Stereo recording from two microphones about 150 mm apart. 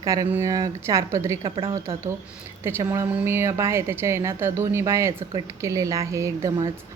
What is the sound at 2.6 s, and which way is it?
A woman's voice, 20° right (ahead or behind).